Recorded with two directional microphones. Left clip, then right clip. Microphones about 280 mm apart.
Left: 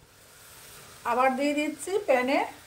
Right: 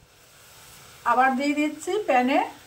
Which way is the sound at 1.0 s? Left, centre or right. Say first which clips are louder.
Right 4 dB; left.